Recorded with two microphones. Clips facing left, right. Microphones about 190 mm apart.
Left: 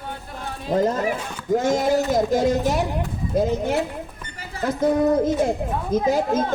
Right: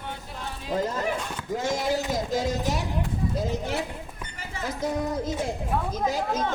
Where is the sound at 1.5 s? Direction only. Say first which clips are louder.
Left 7 dB; 50° left (ahead or behind).